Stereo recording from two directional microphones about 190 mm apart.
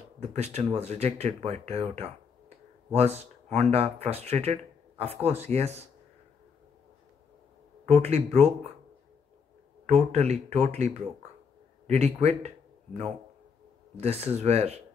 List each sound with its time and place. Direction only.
0.2 s speech: 35° right (ahead or behind)
8.0 s speech: 35° right (ahead or behind)
9.8 s speech: 35° right (ahead or behind)
11.9 s speech: 35° right (ahead or behind)